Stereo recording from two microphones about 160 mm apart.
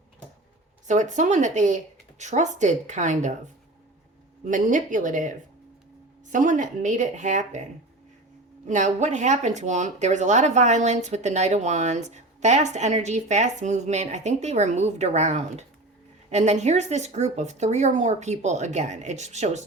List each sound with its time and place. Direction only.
0.9 s speech: 50° right (ahead or behind)
8.6 s speech: 50° right (ahead or behind)